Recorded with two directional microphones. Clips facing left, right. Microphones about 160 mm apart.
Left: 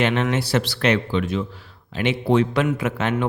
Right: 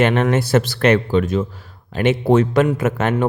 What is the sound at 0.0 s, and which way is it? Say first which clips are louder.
A man's voice: right 5 dB; 50° right (ahead or behind).